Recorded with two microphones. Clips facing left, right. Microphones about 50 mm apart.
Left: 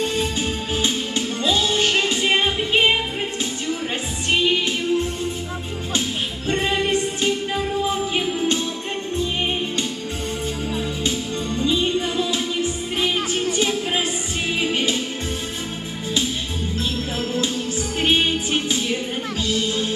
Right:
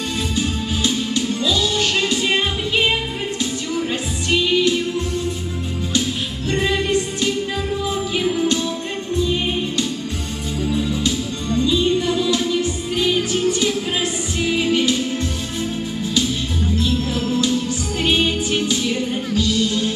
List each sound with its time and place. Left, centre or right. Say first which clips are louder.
0.4 s music: right 2 dB; left
4.3 s music: right 3 dB; left
5.9 s music: right 2 dB; left
11.6 s music: right 3 dB; left
18.0 s music: right 1 dB; left